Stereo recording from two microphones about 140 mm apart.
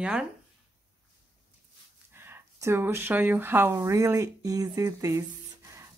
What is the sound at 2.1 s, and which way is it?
Speech, 15° right (ahead or behind).